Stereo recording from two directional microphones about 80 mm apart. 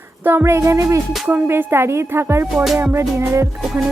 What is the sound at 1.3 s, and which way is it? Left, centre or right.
Speech, right.